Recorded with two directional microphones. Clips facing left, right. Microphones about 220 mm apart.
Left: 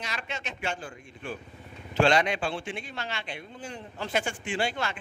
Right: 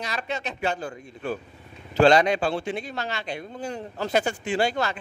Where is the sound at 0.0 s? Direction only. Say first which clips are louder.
Right 6 dB; 35° right (ahead or behind).